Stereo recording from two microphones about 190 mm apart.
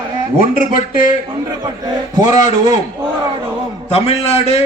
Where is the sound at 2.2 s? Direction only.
40° left (ahead or behind).